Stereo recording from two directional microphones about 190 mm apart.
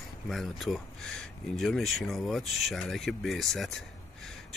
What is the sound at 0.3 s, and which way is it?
Speech, centre (ahead or behind).